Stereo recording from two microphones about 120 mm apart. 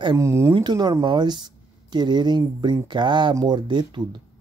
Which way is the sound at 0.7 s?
35° right (ahead or behind).